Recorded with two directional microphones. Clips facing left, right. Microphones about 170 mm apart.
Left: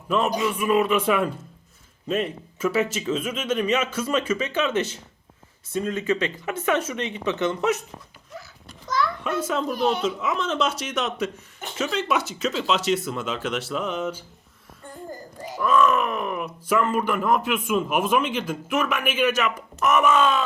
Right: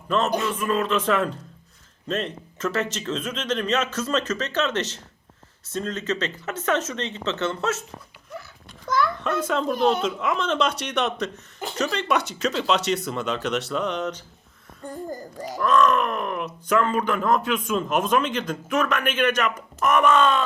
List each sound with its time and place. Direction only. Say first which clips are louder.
0.1 s speech: even; 10° left (ahead or behind)
9.2 s speech: right 1 dB; 5° left (ahead or behind)
15.5 s speech: even; 5° left (ahead or behind)